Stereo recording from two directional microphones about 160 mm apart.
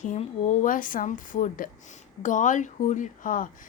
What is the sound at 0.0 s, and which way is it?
Speech, 45° left (ahead or behind).